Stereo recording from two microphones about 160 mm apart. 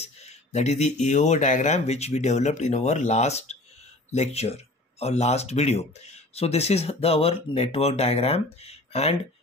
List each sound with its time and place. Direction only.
0.0 s speech: 45° left (ahead or behind)